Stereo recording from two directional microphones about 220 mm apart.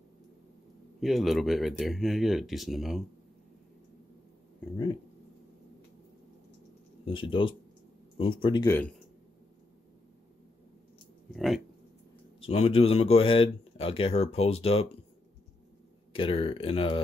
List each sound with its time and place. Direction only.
1.0 s speech: centre (ahead or behind)
7.1 s speech: 25° left (ahead or behind)
11.2 s speech: centre (ahead or behind)
12.4 s speech: 25° left (ahead or behind)
16.1 s speech: 25° left (ahead or behind)